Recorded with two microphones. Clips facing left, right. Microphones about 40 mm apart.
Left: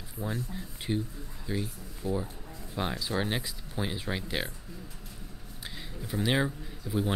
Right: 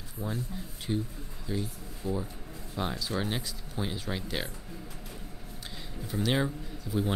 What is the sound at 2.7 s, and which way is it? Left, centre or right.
Speech, centre.